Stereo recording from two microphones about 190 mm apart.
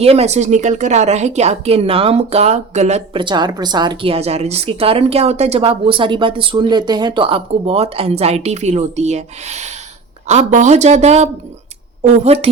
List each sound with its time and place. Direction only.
0.0 s a woman's voice: 35° right (ahead or behind)